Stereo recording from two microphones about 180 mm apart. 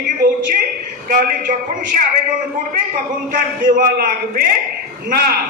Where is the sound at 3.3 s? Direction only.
50° right (ahead or behind).